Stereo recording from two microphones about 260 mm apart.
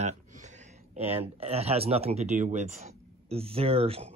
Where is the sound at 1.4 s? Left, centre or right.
Right.